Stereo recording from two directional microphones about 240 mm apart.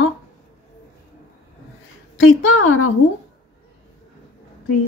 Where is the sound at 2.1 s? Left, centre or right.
Left.